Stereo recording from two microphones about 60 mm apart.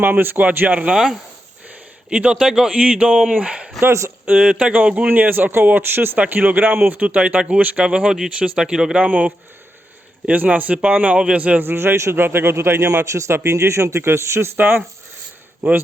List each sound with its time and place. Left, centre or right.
0.0 s speech: right
0.9 s speech: centre
1.6 s speech: centre; by 6.1 s right
6.1 s speech: right
9.0 s speech: right
11.6 s a man's voice: right
14.6 s speech: right